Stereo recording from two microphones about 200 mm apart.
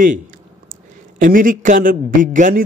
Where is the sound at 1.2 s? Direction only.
45° right (ahead or behind).